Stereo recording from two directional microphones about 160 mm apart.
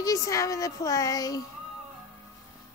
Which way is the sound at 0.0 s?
20° left (ahead or behind).